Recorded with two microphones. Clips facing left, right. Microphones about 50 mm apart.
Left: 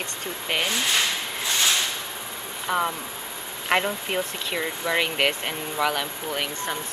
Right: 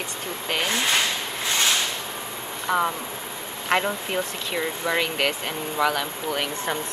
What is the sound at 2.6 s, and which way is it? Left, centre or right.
Speech, centre.